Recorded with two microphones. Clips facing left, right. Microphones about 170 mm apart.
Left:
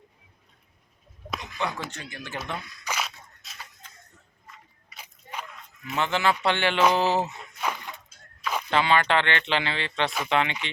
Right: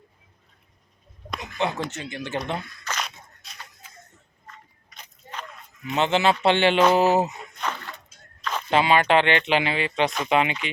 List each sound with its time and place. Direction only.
1.4 s speech: 20° right (ahead or behind)
2.8 s a sound: 5° left (ahead or behind)
4.4 s biting: 10° left (ahead or behind)
5.9 s speech: 20° right (ahead or behind)
7.6 s a sound: 10° left (ahead or behind)
8.7 s speech: 15° right (ahead or behind)